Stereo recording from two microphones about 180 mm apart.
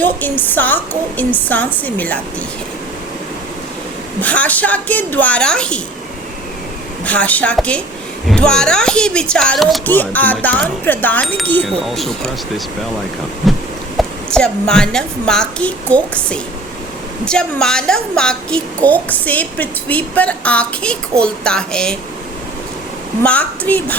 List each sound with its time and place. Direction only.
0.0 s a woman's voice: 10° left (ahead or behind)
4.2 s a woman's voice: 10° left (ahead or behind)
7.0 s a woman's voice: 5° left (ahead or behind)
13.4 s a sound: centre (ahead or behind)
14.3 s a woman's voice: 5° left (ahead or behind)
23.2 s a woman's voice: 5° left (ahead or behind)